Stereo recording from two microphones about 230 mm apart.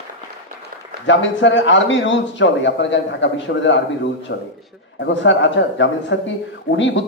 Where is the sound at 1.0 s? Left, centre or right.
Left.